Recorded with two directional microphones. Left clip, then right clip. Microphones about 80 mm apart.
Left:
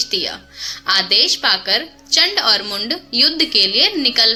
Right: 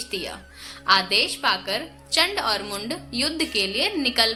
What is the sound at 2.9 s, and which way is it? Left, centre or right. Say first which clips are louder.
A woman's voice: left 12 dB; left.